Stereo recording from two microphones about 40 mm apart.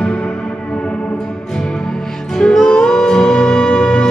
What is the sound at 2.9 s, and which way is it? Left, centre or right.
Wind instrument, centre.